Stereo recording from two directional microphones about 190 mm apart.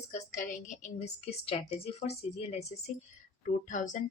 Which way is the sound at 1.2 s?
30° left (ahead or behind).